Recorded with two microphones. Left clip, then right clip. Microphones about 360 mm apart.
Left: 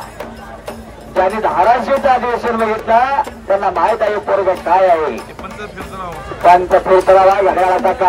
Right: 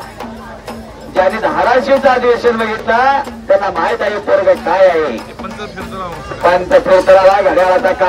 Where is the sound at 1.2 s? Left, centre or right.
Centre.